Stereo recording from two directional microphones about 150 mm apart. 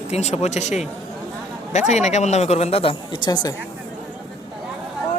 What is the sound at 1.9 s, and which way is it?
Speech, 50° left (ahead or behind).